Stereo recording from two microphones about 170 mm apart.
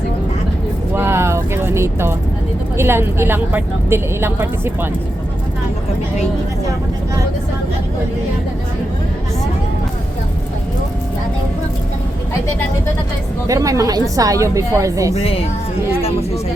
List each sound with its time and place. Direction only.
0.9 s vehicle: 15° right (ahead or behind)
2.7 s speech: 15° right (ahead or behind)
13.5 s a woman's voice: 20° right (ahead or behind)
15.1 s speech: 35° left (ahead or behind)